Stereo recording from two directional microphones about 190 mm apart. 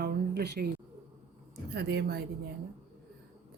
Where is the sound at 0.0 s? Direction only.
55° right (ahead or behind).